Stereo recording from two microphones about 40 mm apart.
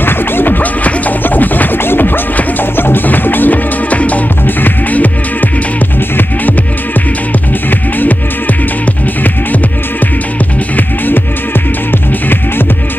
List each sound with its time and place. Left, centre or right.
0.0 s music: left
3.9 s music: left